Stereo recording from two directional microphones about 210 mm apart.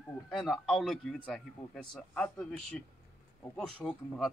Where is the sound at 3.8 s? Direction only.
5° left (ahead or behind).